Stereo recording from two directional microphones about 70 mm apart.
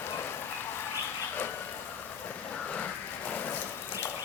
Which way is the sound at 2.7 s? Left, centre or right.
Left.